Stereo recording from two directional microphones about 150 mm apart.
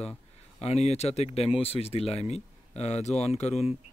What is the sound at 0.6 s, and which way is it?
Speech, 45° left (ahead or behind).